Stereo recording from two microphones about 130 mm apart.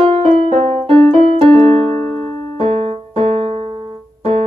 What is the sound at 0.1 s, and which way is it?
Music, 55° right (ahead or behind).